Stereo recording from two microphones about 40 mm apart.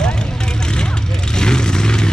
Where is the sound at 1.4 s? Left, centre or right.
Centre.